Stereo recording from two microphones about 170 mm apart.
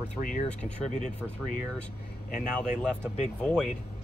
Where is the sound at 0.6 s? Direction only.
45° left (ahead or behind).